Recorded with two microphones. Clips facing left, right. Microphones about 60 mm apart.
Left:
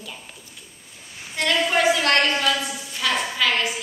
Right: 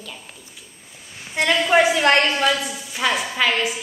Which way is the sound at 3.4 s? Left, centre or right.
Centre.